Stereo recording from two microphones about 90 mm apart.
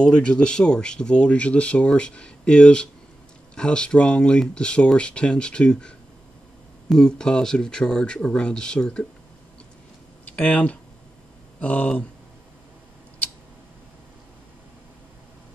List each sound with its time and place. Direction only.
0.0 s speech: 10° left (ahead or behind)
10.2 s speech: 15° left (ahead or behind)